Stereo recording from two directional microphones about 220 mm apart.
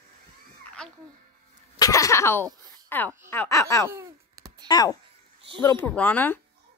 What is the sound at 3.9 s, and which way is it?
Babbling, 15° right (ahead or behind).